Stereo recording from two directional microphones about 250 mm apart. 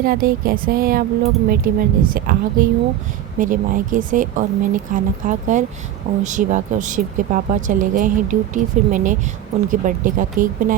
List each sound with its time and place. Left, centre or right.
0.0 s speech: right